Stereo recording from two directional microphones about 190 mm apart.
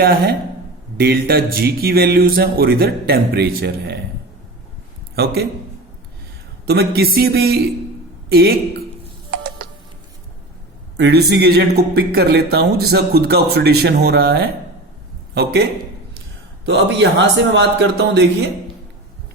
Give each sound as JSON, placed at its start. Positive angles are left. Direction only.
{"t": 0.0, "sound": "speech", "side_deg": -55}
{"t": 5.1, "sound": "speech", "side_deg": -55}
{"t": 6.7, "sound": "speech", "side_deg": -55}
{"t": 9.3, "sound": "music", "side_deg": -55}
{"t": 10.9, "sound": "speech", "side_deg": -60}
{"t": 16.6, "sound": "speech", "side_deg": -70}